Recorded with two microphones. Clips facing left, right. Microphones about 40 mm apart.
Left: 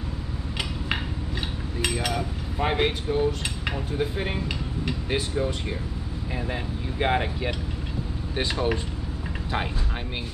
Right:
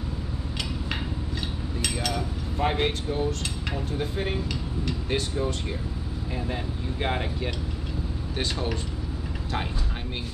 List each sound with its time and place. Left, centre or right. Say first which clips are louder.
1.8 s speech: left 3 dB; centre